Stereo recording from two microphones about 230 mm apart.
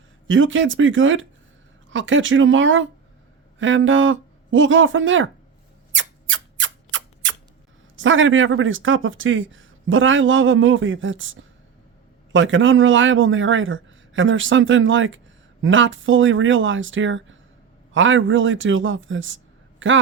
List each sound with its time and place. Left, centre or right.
0.3 s speech: right
5.9 s rub: right
7.9 s speech: right